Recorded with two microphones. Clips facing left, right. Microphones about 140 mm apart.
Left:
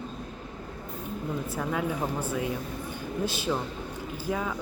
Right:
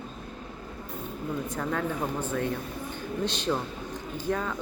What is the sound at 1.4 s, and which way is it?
A woman's voice, 10° left (ahead or behind).